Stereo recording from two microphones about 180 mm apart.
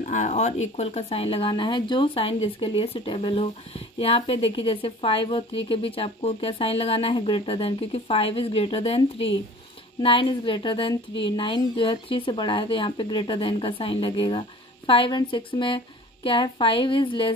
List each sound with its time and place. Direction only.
0.0 s speech: 40° left (ahead or behind)